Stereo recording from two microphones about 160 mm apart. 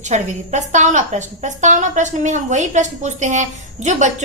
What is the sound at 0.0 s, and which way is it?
A woman's voice, 50° right (ahead or behind).